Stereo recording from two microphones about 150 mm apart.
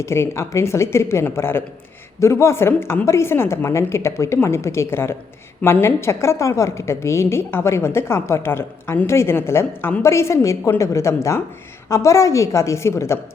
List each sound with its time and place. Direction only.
0.0 s a woman's voice: 20° left (ahead or behind)